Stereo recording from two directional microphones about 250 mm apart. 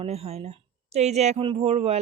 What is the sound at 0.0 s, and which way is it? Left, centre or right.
Speech, right.